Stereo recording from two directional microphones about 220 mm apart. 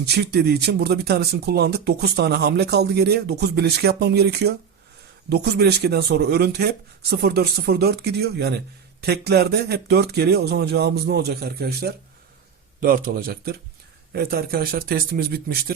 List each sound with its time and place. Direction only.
0.0 s speech: 50° right (ahead or behind)